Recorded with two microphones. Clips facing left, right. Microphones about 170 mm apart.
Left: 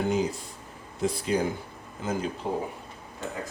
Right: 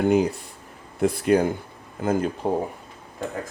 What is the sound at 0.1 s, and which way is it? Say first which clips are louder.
Speech: right 7 dB; 60° right (ahead or behind).